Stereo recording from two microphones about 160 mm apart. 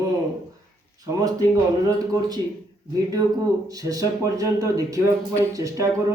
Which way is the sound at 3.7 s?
20° right (ahead or behind).